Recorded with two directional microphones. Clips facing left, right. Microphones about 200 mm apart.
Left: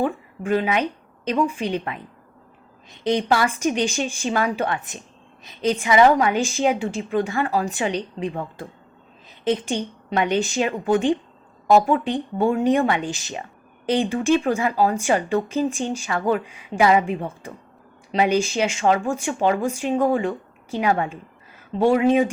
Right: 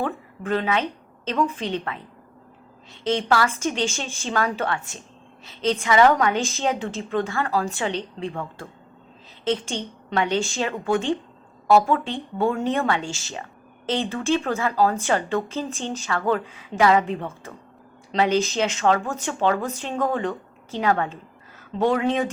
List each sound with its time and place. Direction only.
0.0 s a woman's voice: 10° left (ahead or behind)